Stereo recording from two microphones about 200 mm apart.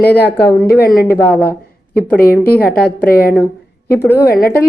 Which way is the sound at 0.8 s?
45° left (ahead or behind).